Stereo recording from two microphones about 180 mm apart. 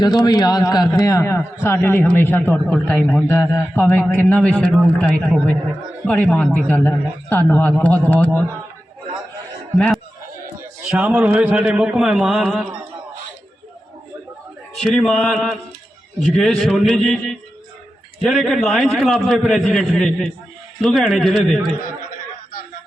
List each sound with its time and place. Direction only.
0.0 s a man's voice: 25° left (ahead or behind)
9.7 s speech: 5° left (ahead or behind)
10.8 s a man's voice: 5° right (ahead or behind)
14.8 s a man's voice: centre (ahead or behind)